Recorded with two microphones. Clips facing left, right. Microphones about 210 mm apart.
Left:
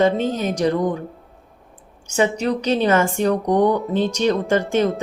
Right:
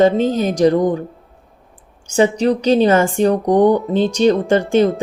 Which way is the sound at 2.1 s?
30° right (ahead or behind).